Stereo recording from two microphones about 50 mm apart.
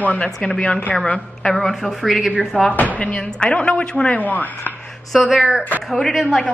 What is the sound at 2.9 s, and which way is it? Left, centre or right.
Speech, left.